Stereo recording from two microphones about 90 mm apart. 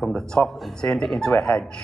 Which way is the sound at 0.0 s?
5° left (ahead or behind).